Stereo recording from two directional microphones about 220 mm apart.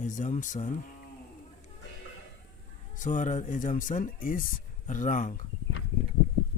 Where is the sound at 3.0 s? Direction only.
35° left (ahead or behind).